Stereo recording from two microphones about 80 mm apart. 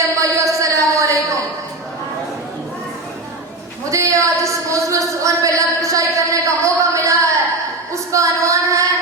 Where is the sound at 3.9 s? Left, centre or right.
Right.